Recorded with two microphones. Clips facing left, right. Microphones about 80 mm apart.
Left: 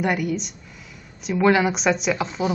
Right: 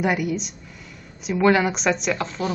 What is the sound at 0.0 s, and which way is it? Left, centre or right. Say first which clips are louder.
A woman's voice: even; centre.